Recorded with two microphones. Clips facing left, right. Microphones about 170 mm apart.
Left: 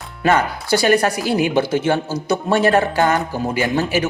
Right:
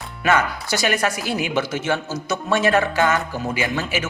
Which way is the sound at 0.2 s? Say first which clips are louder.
Left 3 dB; 30° left (ahead or behind).